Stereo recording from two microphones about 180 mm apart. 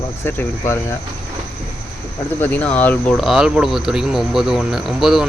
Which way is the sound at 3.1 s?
Centre (ahead or behind).